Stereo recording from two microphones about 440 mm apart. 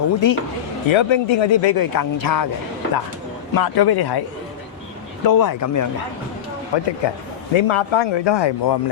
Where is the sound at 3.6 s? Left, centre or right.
Left.